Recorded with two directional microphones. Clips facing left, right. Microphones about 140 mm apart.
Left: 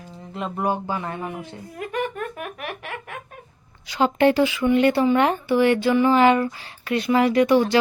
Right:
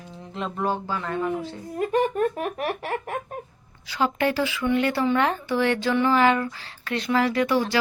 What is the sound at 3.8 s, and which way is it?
Speech, 20° left (ahead or behind).